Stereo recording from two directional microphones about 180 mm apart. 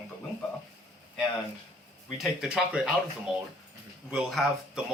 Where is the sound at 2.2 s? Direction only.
5° right (ahead or behind).